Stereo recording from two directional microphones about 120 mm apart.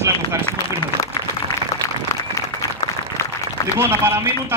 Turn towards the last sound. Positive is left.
turn(degrees=-20)  # may be behind; listen again after turning